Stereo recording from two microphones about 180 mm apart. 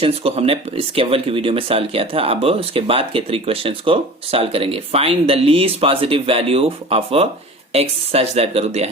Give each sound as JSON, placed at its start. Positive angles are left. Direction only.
{"t": 0.0, "sound": "speech", "side_deg": -35}